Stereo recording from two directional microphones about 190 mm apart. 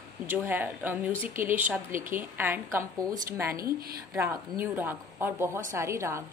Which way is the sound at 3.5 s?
50° right (ahead or behind).